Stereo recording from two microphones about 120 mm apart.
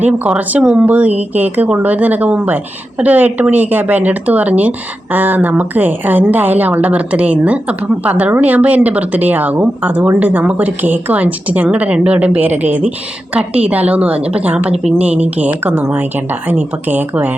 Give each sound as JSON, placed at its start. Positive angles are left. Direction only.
{"t": 0.3, "sound": "a woman's voice", "side_deg": -10}
{"t": 14.7, "sound": "a woman's voice", "side_deg": -60}
{"t": 15.0, "sound": "a woman's voice", "side_deg": -10}